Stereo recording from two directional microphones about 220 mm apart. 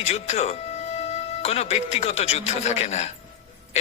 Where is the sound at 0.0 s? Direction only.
30° left (ahead or behind).